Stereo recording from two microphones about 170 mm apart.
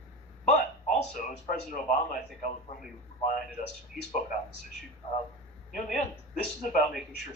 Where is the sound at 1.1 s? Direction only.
50° left (ahead or behind).